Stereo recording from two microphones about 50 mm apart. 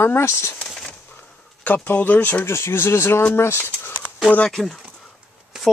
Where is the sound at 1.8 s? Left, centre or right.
Left.